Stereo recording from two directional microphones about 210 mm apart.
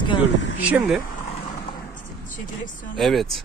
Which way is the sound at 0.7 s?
5° right (ahead or behind).